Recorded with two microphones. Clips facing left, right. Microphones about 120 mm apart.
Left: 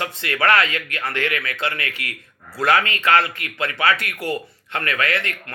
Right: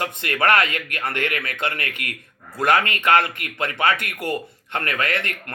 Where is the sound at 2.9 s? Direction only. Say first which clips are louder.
Even; 20° right (ahead or behind).